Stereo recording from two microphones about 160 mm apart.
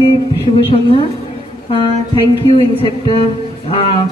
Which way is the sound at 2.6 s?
35° left (ahead or behind).